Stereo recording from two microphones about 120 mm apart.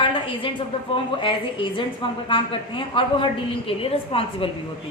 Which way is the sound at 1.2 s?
45° left (ahead or behind).